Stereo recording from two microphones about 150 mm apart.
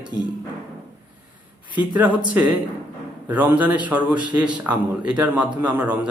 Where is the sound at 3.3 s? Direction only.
10° right (ahead or behind).